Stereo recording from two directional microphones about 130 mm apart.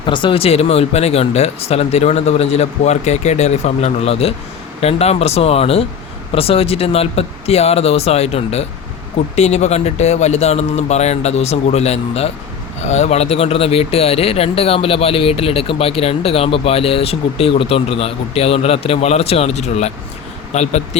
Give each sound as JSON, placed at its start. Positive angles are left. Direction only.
{"t": 0.0, "sound": "speech", "side_deg": 40}